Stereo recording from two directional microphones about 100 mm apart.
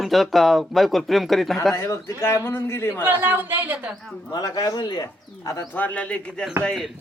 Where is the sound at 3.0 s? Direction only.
20° right (ahead or behind).